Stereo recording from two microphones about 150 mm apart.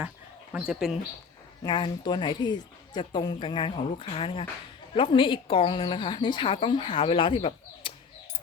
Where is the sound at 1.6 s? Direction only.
30° left (ahead or behind).